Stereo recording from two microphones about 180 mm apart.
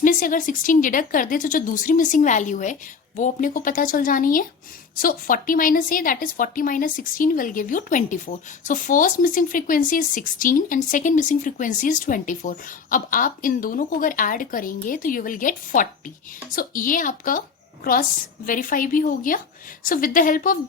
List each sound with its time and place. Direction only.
0.0 s speech: 50° left (ahead or behind)
18.4 s speech: 50° left (ahead or behind)